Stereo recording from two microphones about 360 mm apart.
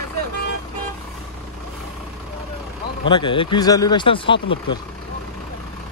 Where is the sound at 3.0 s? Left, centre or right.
Centre.